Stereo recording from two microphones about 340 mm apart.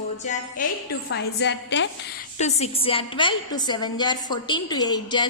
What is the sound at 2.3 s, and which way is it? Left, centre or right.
A woman's voice, centre.